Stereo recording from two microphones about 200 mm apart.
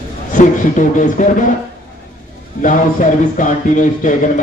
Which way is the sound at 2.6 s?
40° left (ahead or behind).